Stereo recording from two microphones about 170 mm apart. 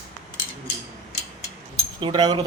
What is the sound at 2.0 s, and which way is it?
Speech, 25° right (ahead or behind).